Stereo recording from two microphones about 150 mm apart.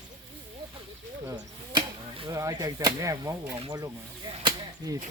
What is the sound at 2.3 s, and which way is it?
Whip, 20° right (ahead or behind).